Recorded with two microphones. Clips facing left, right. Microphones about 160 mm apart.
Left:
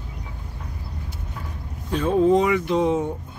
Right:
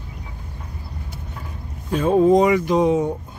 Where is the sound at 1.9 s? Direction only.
45° right (ahead or behind).